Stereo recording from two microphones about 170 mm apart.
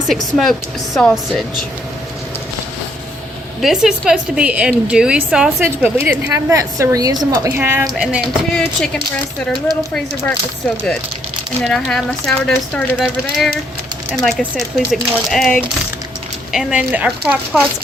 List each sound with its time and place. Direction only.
0.1 s speech: centre (ahead or behind)
3.6 s a woman's voice: 5° right (ahead or behind)
7.9 s speech: centre (ahead or behind)
11.6 s speech: 5° left (ahead or behind)